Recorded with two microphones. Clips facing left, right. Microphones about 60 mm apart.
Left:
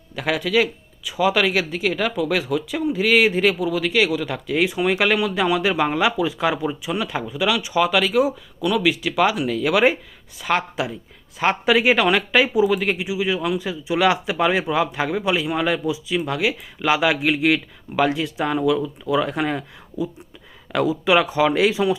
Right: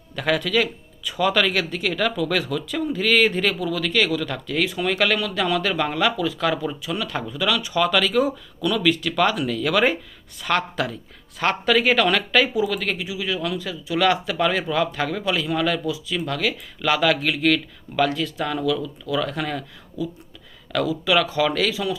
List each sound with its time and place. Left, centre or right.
0.2 s speech: centre; by 21.9 s left